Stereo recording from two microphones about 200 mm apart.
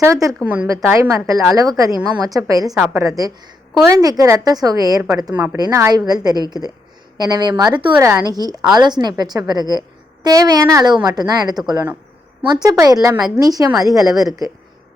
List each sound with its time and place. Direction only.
0.0 s a woman's voice: 15° right (ahead or behind)